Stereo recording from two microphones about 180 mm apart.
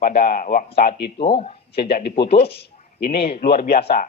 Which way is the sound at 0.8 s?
60° left (ahead or behind).